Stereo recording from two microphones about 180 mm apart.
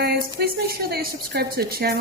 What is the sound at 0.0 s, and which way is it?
A woman's voice, 60° right (ahead or behind).